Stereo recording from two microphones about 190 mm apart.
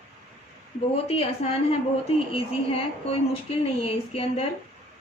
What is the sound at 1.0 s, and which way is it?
Speech, 30° left (ahead or behind).